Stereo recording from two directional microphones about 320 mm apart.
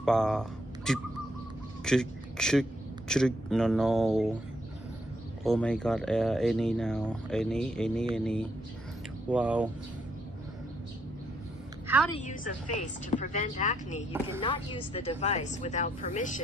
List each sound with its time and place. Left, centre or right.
0.0 s speech: centre
5.4 s speech: centre
12.2 s speech: left